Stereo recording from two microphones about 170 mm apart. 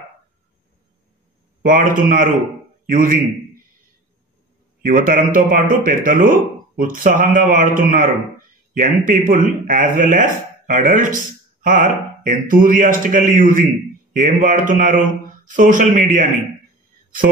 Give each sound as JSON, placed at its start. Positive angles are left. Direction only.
{"t": 1.6, "sound": "a man's voice", "side_deg": -55}
{"t": 4.8, "sound": "a man's voice", "side_deg": -55}